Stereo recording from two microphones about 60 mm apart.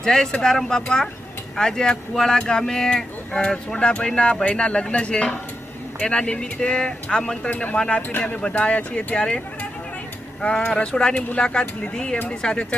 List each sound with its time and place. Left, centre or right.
0.0 s speech: centre
10.4 s speech: centre